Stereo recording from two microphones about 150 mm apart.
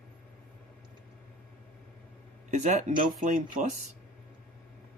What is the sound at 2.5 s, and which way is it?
Speech, 55° right (ahead or behind).